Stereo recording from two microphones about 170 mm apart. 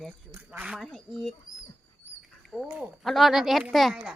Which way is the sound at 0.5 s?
10° right (ahead or behind).